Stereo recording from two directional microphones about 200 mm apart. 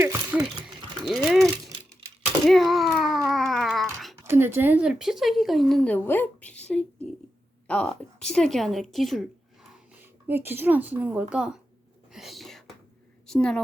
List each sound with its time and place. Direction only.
0.0 s a sound: 5° right (ahead or behind)
1.0 s dog: centre (ahead or behind)
2.5 s a sound: centre (ahead or behind)
4.3 s a woman's voice: 10° right (ahead or behind)
10.2 s a woman's voice: 10° right (ahead or behind)
12.1 s whispering: centre (ahead or behind)
13.2 s a woman's voice: 5° left (ahead or behind)